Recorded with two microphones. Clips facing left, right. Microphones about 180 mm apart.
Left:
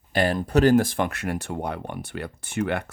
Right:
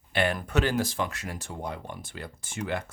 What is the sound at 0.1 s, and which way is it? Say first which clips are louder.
Speech: left 5 dB; 40° left (ahead or behind).